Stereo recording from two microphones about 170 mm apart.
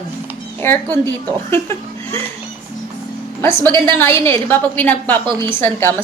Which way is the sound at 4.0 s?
15° left (ahead or behind).